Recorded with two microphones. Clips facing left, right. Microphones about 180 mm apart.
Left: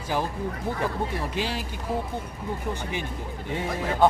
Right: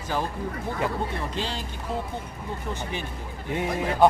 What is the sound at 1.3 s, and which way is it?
Speech, 10° left (ahead or behind).